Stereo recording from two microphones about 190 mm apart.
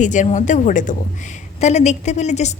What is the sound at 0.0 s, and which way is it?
A woman's voice, 40° left (ahead or behind).